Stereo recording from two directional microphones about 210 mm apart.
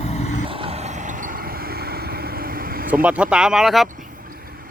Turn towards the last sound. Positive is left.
turn(degrees=0)  # may be behind; listen again after turning